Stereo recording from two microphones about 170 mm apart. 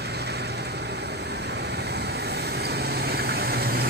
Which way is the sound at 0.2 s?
75° right (ahead or behind).